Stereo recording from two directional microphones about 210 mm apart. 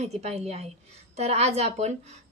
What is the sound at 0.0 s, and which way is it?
Speech, 30° right (ahead or behind).